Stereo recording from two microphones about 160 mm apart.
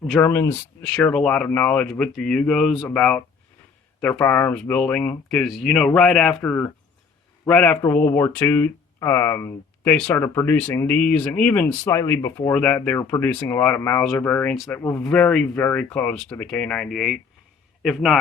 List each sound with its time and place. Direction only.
0.2 s a man's voice: 15° left (ahead or behind); by 18.2 s centre (ahead or behind)